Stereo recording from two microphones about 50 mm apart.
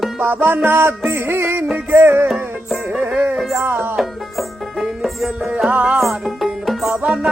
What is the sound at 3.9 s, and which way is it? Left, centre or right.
Music, centre.